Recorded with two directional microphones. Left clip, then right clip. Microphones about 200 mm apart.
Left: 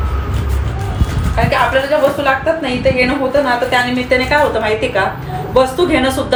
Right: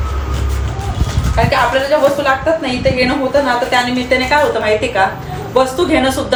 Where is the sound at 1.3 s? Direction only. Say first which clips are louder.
Even; 5° right (ahead or behind).